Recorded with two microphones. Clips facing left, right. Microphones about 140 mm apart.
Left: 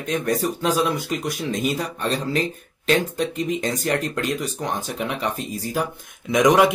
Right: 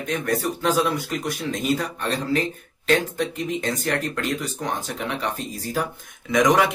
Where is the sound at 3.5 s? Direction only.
15° left (ahead or behind).